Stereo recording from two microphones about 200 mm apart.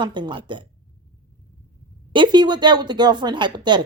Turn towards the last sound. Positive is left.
turn(degrees=-25)  # may be behind; listen again after turning